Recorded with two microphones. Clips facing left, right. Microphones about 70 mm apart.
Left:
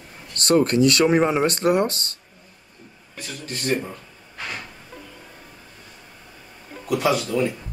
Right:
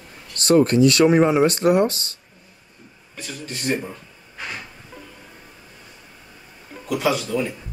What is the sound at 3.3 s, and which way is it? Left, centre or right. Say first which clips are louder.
Speech: left 1 dB; centre.